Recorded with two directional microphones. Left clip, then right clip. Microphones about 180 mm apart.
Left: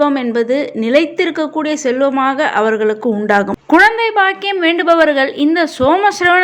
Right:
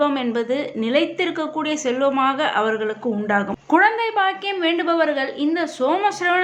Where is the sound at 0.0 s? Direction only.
30° left (ahead or behind).